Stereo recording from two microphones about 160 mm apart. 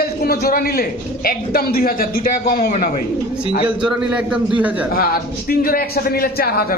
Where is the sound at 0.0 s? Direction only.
80° left.